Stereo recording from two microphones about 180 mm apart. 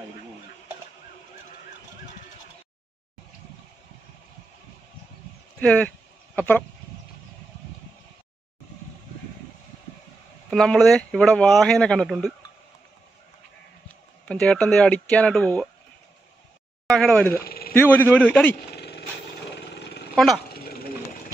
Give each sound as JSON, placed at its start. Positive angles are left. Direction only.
{"t": 5.6, "sound": "speech", "side_deg": 5}
{"t": 10.5, "sound": "speech", "side_deg": 5}
{"t": 14.2, "sound": "speech", "side_deg": 5}
{"t": 16.8, "sound": "speech", "side_deg": 5}
{"t": 17.4, "sound": "a sound", "side_deg": 55}
{"t": 17.7, "sound": "speech", "side_deg": 10}
{"t": 18.7, "sound": "vehicle", "side_deg": 65}
{"t": 19.5, "sound": "a sound", "side_deg": 70}
{"t": 20.4, "sound": "a sound", "side_deg": 60}